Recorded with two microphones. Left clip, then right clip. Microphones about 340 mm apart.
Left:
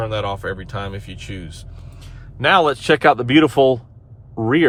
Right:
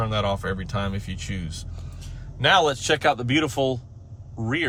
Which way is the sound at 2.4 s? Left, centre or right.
Left.